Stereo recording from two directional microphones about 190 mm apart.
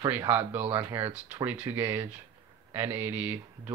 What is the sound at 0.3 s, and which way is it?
Speech, 10° right (ahead or behind).